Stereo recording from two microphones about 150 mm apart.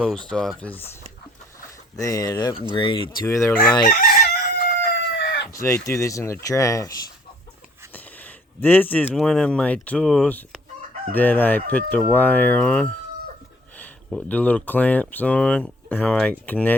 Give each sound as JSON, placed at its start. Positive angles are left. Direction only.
{"t": 0.0, "sound": "speech", "side_deg": 5}
{"t": 2.0, "sound": "speech", "side_deg": 20}
{"t": 3.2, "sound": "speech", "side_deg": 20}
{"t": 3.8, "sound": "chicken", "side_deg": 85}
{"t": 5.5, "sound": "speech", "side_deg": 20}
{"t": 7.9, "sound": "speech", "side_deg": 10}